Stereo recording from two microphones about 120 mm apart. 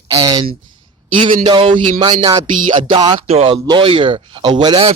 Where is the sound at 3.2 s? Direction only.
55° right (ahead or behind).